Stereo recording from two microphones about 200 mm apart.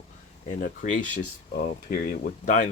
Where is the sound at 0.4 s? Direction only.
40° left (ahead or behind).